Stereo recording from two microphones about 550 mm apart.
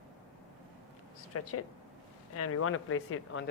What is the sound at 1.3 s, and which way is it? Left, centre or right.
Speech, left.